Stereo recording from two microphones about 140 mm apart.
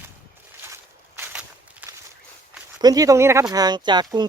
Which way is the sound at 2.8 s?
25° right (ahead or behind).